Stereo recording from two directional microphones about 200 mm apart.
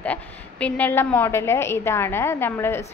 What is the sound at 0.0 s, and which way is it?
A woman's voice, 5° left (ahead or behind).